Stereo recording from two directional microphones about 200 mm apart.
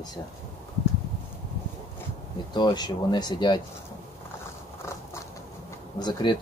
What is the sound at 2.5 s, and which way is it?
Speech, 20° left (ahead or behind).